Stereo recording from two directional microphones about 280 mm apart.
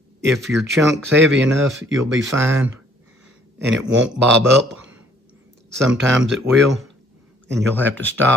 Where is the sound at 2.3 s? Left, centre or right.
Centre.